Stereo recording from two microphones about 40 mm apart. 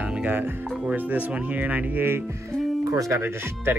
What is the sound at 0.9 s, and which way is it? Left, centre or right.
Speech, right.